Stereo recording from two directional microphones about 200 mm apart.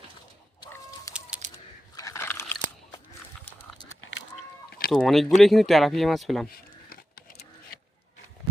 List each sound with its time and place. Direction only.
0.6 s chicken: 15° left (ahead or behind)
1.4 s a sound: 35° right (ahead or behind)
2.0 s biting: 15° left (ahead or behind)
4.9 s speech: centre (ahead or behind)
6.5 s vehicle: 45° left (ahead or behind)